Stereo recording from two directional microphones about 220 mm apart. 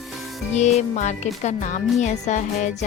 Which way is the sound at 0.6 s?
30° left (ahead or behind).